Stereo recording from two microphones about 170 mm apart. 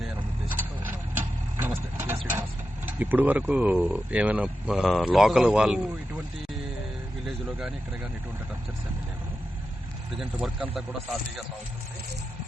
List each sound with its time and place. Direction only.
0.0 s vehicle: 10° right (ahead or behind)
2.8 s speech: 10° right (ahead or behind)
10.2 s speech: centre (ahead or behind)